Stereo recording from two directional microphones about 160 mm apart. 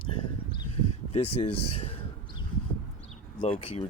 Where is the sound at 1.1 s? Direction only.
40° left (ahead or behind).